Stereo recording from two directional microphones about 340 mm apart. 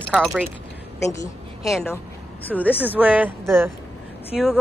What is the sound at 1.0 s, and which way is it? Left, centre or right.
A woman's voice, centre.